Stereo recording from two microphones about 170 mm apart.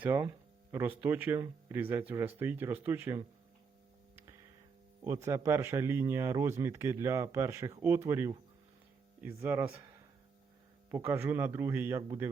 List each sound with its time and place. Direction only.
0.0 s speech: 15° right (ahead or behind)
5.0 s speech: 15° right (ahead or behind)
10.9 s speech: 15° right (ahead or behind)